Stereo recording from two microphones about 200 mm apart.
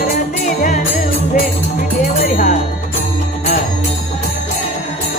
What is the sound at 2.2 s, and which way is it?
Speech, 40° left (ahead or behind).